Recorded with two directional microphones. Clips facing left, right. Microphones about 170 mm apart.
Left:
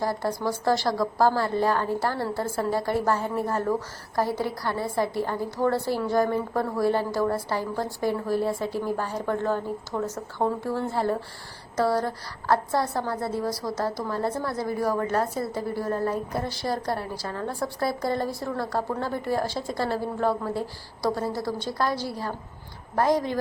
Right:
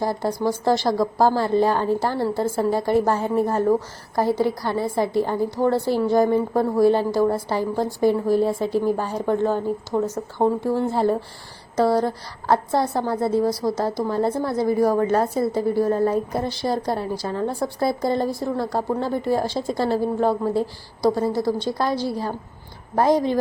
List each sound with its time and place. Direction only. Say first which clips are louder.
0.0 s speech: right 4 dB; 20° right (ahead or behind)